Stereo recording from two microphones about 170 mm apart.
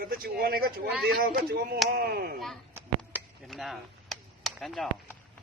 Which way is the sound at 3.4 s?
Centre (ahead or behind).